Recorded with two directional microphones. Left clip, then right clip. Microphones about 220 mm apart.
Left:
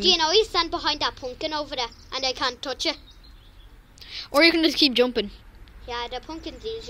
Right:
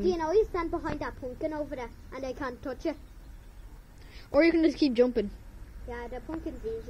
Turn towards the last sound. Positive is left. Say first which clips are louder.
# left 5 dB
turn(degrees=-10)  # may be behind; listen again after turning